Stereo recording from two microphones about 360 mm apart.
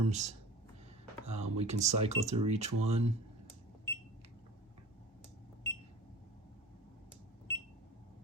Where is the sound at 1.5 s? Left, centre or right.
Centre.